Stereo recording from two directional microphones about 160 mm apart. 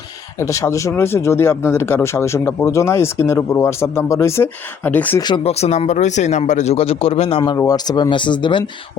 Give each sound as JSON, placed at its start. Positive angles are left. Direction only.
{"t": 0.3, "sound": "speech", "side_deg": 20}
{"t": 5.2, "sound": "speech", "side_deg": 35}
{"t": 7.5, "sound": "speech", "side_deg": 20}